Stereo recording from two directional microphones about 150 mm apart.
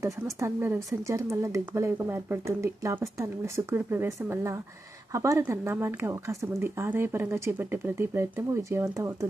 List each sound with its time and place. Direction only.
0.0 s speech: 15° right (ahead or behind)